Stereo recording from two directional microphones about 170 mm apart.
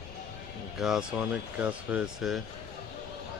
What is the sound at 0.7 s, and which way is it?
Speech, centre (ahead or behind).